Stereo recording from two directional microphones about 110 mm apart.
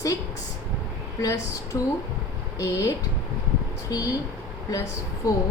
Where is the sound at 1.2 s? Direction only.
30° left (ahead or behind).